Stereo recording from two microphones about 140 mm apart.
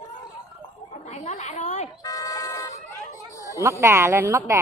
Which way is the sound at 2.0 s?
25° left (ahead or behind).